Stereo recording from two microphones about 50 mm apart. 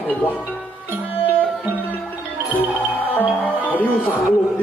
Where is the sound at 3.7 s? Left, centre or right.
Left.